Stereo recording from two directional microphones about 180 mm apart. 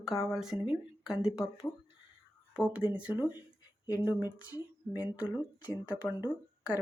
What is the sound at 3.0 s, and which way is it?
Speech, 10° right (ahead or behind).